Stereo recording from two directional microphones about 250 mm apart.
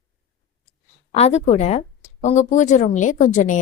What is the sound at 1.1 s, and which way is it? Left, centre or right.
A woman's voice, left.